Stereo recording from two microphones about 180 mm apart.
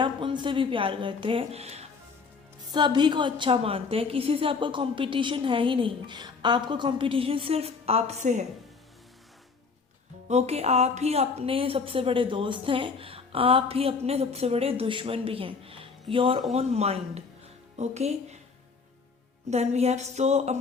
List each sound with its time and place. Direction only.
0.0 s a woman's voice: 25° right (ahead or behind)
2.7 s a woman's voice: 25° right (ahead or behind); by 8.4 s 40° right (ahead or behind)
10.2 s a woman's voice: 35° right (ahead or behind)
19.5 s a woman's voice: 35° right (ahead or behind)